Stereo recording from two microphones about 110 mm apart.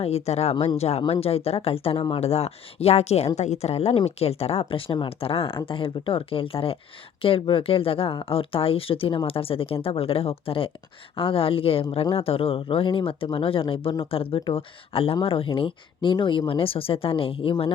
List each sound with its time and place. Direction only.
0.3 s speech: 75° left (ahead or behind)
3.3 s speech: 90° left; by 5.0 s 50° left (ahead or behind)
5.0 s speech: 60° left (ahead or behind)